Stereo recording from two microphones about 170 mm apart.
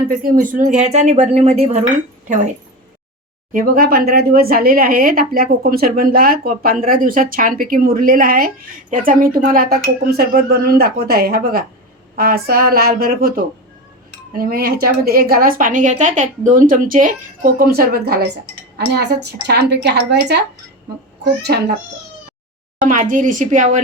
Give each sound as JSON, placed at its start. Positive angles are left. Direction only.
{"t": 0.1, "sound": "speech", "side_deg": -50}
{"t": 3.5, "sound": "speech", "side_deg": -55}
{"t": 21.4, "sound": "a child's voice", "side_deg": -70}
{"t": 22.8, "sound": "speech", "side_deg": -50}